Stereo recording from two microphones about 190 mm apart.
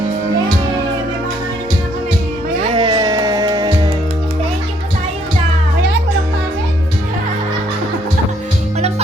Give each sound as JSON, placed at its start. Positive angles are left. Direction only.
{"t": 2.7, "sound": "music", "side_deg": -25}